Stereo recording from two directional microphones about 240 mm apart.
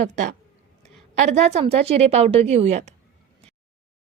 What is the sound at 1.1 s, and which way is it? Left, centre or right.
A woman's voice, right.